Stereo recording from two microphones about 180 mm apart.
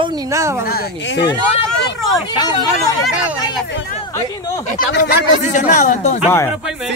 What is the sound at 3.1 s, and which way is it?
Speech, 5° right (ahead or behind).